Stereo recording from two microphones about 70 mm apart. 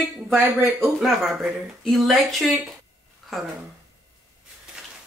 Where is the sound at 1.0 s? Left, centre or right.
Centre.